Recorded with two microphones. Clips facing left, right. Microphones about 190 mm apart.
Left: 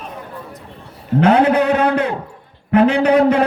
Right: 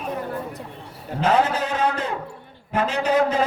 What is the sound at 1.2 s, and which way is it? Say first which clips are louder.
A man's voice: left 7 dB; 60° left (ahead or behind).